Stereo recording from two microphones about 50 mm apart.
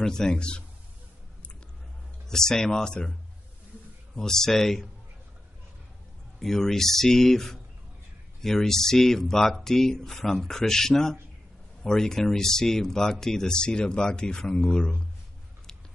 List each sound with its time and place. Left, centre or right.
0.0 s speech: centre
2.2 s speech: centre
6.4 s speech: centre